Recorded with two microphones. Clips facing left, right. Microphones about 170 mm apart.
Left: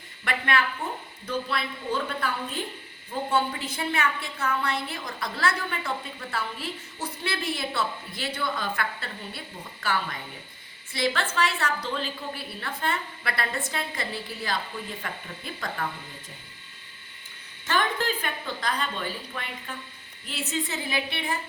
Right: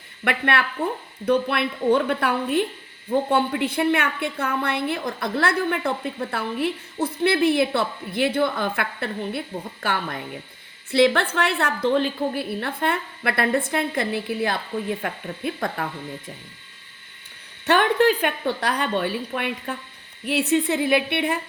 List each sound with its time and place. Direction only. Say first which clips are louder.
0.3 s a woman's voice: right 4 dB; 60° right (ahead or behind)
17.7 s a woman's voice: right 9 dB; 65° right (ahead or behind)